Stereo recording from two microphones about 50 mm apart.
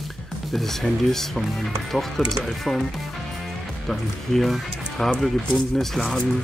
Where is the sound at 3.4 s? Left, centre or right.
Centre.